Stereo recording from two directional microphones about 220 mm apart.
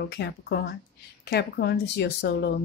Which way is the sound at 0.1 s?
50° left (ahead or behind).